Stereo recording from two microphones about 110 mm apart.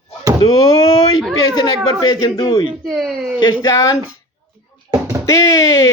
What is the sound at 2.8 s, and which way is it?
Speech, centre (ahead or behind).